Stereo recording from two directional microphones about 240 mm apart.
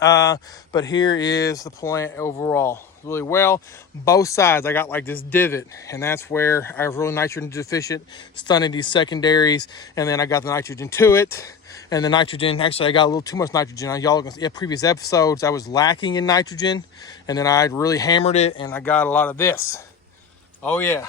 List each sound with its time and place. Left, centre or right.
0.0 s speech: centre
18.7 s speech: centre